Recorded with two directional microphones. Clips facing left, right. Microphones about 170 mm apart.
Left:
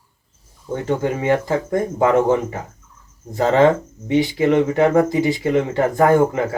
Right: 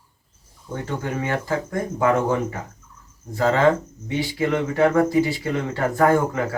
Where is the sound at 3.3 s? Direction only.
20° left (ahead or behind).